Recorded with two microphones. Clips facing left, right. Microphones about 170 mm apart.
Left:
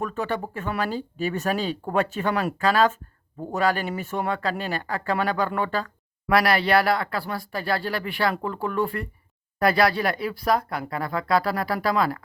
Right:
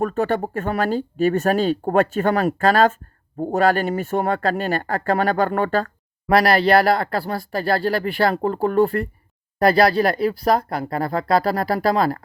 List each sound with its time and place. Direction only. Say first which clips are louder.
0.0 s speech: right 7 dB; 50° right (ahead or behind)
6.2 s speech: right 5 dB; 35° right (ahead or behind)